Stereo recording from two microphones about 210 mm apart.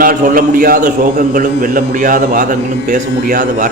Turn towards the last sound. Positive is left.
turn(degrees=-40)  # may be behind; listen again after turning